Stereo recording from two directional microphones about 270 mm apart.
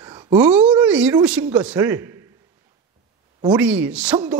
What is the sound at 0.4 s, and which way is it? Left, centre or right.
A man's voice, centre.